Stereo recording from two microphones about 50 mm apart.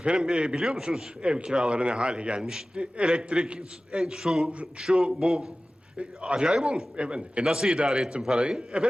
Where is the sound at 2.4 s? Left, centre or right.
Centre.